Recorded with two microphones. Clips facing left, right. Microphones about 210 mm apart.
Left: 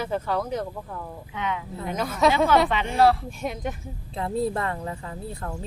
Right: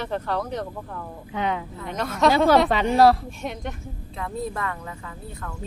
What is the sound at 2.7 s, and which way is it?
Speech, 40° right (ahead or behind).